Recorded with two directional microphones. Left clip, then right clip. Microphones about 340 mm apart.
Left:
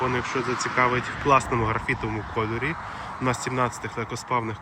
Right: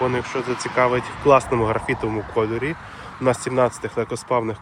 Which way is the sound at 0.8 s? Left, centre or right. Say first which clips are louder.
Right 5 dB; centre.